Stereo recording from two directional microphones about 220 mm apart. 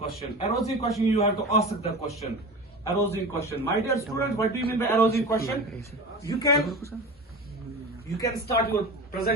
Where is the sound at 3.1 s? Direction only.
10° left (ahead or behind).